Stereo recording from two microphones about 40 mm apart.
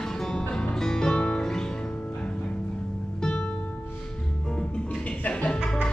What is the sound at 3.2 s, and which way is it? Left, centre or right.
Music, centre.